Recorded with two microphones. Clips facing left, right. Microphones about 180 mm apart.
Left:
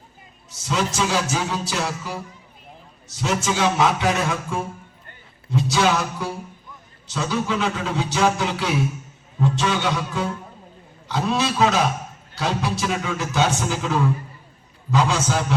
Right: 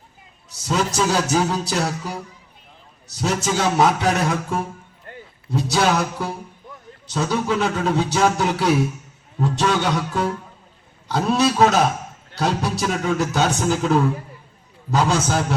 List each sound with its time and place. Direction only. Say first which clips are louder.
0.7 s speech: right 2 dB; 40° right (ahead or behind)
3.2 s speech: right 1 dB; 40° right (ahead or behind)
5.7 s a man's voice: right 2 dB; 40° right (ahead or behind)